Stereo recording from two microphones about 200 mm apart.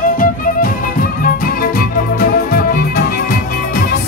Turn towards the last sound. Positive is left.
turn(degrees=50)  # may be behind; listen again after turning